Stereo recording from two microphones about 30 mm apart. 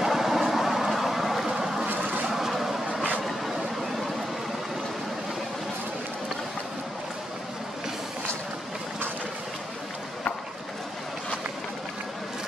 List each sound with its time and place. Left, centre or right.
0.0 s vehicle: centre
1.9 s a sound: right
2.2 s vehicle: centre